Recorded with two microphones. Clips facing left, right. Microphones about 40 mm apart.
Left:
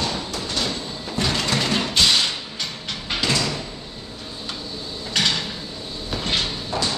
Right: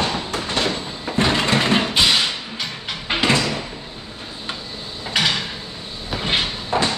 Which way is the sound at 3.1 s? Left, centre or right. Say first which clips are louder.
Right 4 dB; right.